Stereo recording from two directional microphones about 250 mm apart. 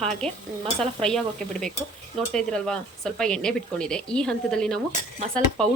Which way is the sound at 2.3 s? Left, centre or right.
Centre.